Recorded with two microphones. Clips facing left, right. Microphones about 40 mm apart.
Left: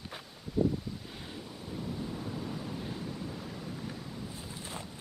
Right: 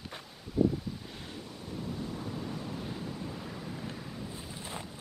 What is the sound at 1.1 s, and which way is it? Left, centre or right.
Waves, centre.